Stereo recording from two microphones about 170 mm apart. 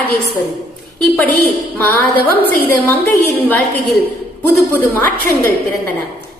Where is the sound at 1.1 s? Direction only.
10° left (ahead or behind).